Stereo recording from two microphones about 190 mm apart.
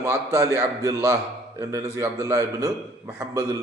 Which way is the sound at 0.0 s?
15° right (ahead or behind).